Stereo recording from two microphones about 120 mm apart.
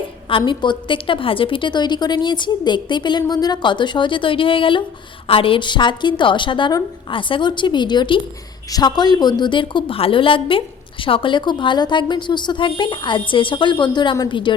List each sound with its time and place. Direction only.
0.3 s a woman's voice: 45° left (ahead or behind)